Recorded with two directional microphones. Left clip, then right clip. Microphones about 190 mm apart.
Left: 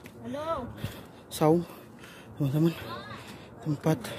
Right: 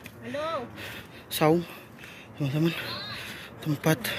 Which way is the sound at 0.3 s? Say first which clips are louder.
Right 1 dB; 70° left (ahead or behind).